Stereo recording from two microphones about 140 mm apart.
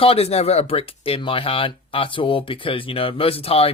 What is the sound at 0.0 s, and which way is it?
Speech, 45° left (ahead or behind).